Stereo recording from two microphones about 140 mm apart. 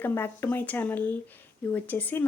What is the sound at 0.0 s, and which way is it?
A woman's voice, 15° left (ahead or behind).